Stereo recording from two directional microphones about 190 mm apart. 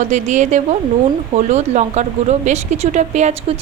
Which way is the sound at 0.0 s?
40° right (ahead or behind).